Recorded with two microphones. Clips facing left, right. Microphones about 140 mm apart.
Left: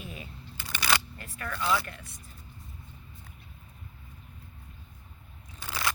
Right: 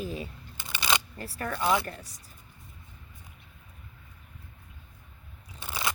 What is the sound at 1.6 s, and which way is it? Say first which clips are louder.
Speech: right 3 dB; 20° right (ahead or behind).